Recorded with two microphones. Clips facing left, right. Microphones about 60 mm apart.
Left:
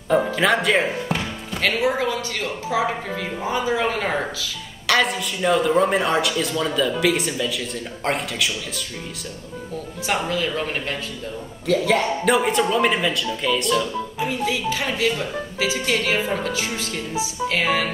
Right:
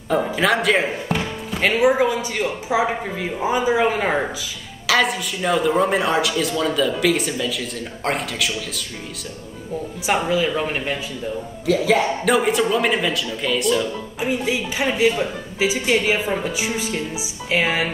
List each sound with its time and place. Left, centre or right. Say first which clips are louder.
0.1 s speech: even; centre
1.6 s speech: right 4 dB; centre
4.8 s a man's voice: right 1 dB; centre
10.0 s a man's voice: right 4 dB; centre
14.2 s speech: right 2 dB; centre